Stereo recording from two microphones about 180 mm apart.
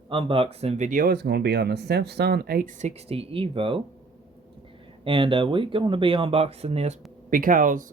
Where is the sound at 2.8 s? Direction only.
35° right (ahead or behind).